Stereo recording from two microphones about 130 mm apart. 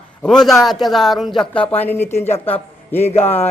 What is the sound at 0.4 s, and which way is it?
A man's voice, centre (ahead or behind).